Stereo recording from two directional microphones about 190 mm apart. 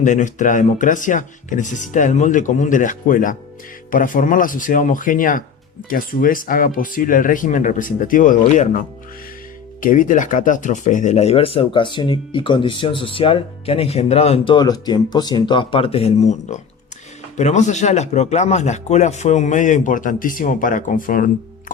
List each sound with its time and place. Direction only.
0.0 s speech: 40° left (ahead or behind)
9.8 s speech: 45° left (ahead or behind)